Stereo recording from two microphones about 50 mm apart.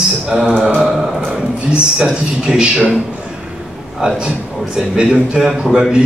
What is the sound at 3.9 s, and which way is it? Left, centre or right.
A man's voice, centre.